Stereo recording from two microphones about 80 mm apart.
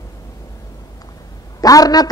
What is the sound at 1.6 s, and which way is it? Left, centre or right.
Speech, left.